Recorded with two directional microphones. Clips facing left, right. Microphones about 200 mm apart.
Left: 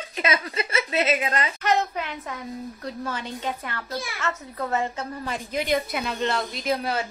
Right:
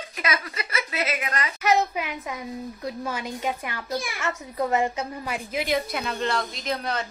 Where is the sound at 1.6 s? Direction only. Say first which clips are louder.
Right 4 dB; 10° right (ahead or behind).